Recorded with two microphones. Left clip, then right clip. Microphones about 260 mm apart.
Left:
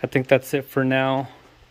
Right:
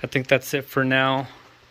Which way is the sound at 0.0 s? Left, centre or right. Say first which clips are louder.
Left 2 dB; centre.